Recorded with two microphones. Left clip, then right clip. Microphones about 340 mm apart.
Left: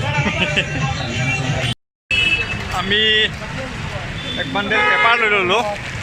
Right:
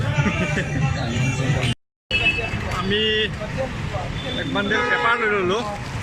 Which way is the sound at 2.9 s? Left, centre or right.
Centre.